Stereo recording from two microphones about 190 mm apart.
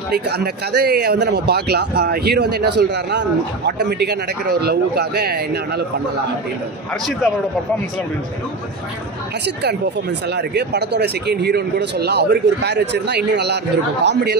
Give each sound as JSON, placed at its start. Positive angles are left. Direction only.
{"t": 0.1, "sound": "speech", "side_deg": -55}
{"t": 10.3, "sound": "speech", "side_deg": -60}